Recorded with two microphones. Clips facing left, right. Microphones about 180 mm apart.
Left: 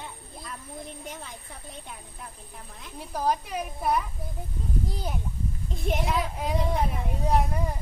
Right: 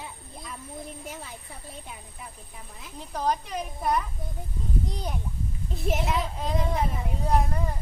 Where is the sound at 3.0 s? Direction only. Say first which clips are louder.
Left 1 dB; 10° left (ahead or behind).